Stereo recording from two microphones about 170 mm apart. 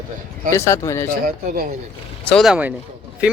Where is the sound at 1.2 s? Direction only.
55° right (ahead or behind).